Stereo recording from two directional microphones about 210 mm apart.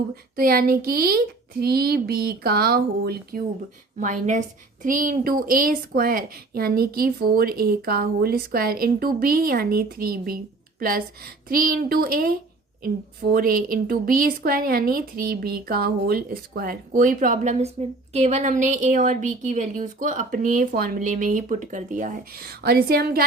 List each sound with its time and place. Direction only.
0.3 s a woman's voice: 45° right (ahead or behind)
4.0 s a woman's voice: 35° right (ahead or behind)